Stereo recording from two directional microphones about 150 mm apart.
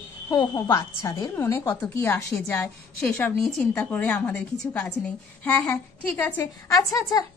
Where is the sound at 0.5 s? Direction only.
20° left (ahead or behind).